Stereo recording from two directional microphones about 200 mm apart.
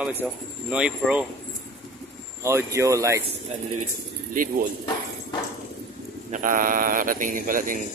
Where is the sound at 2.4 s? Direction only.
15° right (ahead or behind).